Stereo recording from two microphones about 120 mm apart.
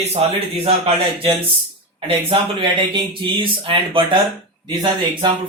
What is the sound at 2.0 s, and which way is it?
Speech, 45° right (ahead or behind).